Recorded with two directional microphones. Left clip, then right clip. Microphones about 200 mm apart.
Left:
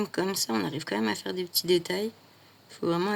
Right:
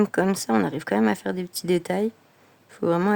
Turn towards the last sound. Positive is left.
turn(degrees=-45)  # may be behind; listen again after turning